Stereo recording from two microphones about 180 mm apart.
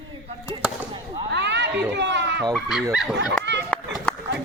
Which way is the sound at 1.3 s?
70° right (ahead or behind).